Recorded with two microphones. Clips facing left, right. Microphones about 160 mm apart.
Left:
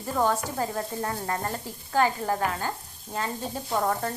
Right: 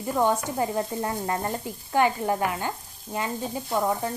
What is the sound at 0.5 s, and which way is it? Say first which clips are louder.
Speech: right 3 dB; 20° right (ahead or behind).